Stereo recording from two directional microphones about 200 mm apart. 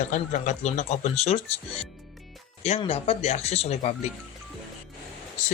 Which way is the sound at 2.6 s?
30° left (ahead or behind).